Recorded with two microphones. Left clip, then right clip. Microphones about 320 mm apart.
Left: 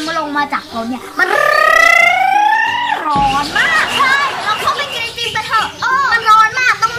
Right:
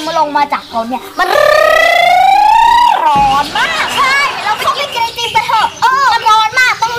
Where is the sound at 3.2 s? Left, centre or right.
Centre.